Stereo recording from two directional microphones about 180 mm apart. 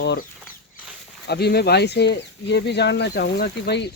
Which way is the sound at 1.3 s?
65° left (ahead or behind).